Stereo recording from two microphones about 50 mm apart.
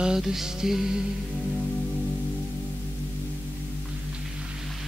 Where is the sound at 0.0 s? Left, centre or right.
Centre.